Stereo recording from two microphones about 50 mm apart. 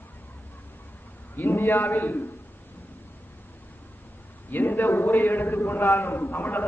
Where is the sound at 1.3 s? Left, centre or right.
Left.